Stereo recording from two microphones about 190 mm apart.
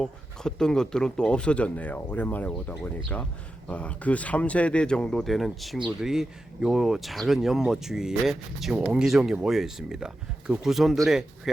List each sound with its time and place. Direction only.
0.0 s speech: 5° left (ahead or behind)